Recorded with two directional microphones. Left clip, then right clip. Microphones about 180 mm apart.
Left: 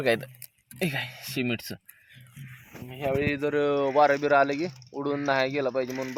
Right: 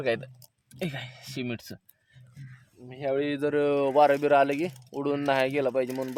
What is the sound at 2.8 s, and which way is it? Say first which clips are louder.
Speech: left 1 dB; 20° left (ahead or behind).